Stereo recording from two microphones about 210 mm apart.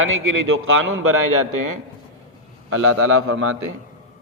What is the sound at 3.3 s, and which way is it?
Speech, 75° right (ahead or behind).